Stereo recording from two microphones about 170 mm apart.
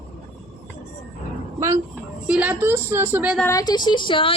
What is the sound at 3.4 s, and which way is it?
Speech, 20° left (ahead or behind).